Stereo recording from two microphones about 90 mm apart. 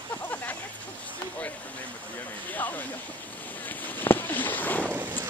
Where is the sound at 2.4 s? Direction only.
20° left (ahead or behind).